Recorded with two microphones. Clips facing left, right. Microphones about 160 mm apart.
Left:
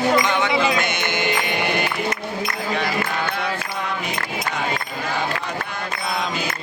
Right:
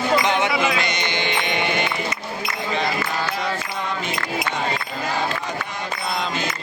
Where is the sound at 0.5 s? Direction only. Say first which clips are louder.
Left 2 dB; 35° left (ahead or behind).